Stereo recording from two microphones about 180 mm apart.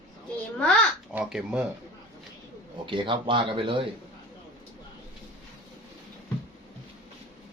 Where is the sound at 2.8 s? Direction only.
25° right (ahead or behind).